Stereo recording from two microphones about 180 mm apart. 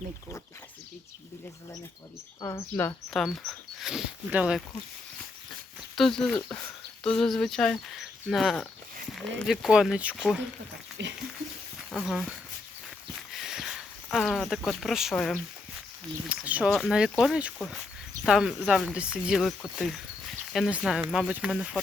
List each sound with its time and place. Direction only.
2.4 s speech: 15° left (ahead or behind); by 4.6 s 5° right (ahead or behind)
6.0 s speech: 5° left (ahead or behind)
11.0 s a sound: 80° right
11.9 s speech: centre (ahead or behind)
13.3 s a sound: centre (ahead or behind)
16.3 s speech: 10° right (ahead or behind)